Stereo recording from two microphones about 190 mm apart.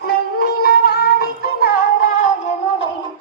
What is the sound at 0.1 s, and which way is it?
Music, 55° left (ahead or behind).